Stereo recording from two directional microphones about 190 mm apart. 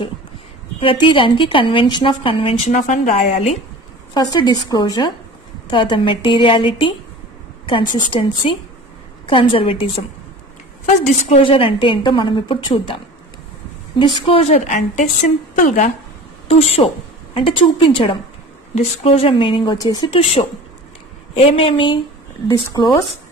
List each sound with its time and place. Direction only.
0.7 s a woman's voice: 30° left (ahead or behind)
4.1 s a woman's voice: 20° left (ahead or behind)
11.2 s a woman's voice: 30° left (ahead or behind)
13.9 s a woman's voice: 25° left (ahead or behind); by 15.9 s 45° left (ahead or behind)
16.4 s a woman's voice: 30° left (ahead or behind)
22.5 s speech: 15° left (ahead or behind)